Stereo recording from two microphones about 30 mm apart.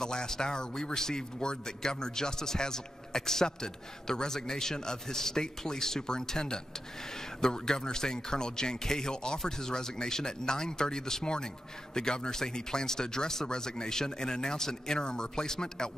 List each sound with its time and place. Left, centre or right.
0.0 s a man's voice: left